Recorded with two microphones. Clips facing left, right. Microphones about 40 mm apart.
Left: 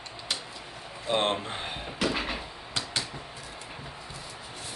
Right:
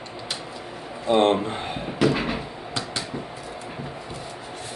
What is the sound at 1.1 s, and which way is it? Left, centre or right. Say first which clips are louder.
Speech: right 8 dB; centre.